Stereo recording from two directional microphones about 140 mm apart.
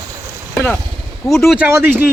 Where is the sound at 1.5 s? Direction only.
15° right (ahead or behind).